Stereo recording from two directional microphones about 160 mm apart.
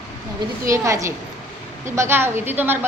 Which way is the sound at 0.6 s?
20° right (ahead or behind).